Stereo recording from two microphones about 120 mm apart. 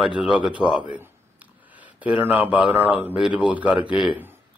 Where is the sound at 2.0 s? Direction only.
15° right (ahead or behind).